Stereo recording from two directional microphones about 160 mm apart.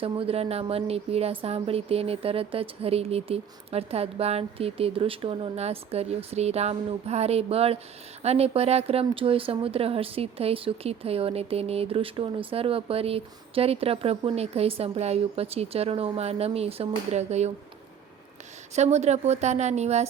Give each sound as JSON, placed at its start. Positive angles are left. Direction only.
{"t": 0.0, "sound": "speech", "side_deg": -35}
{"t": 18.7, "sound": "a woman's voice", "side_deg": -45}